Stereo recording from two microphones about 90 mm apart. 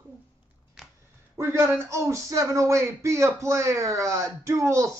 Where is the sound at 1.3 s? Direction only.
30° right (ahead or behind).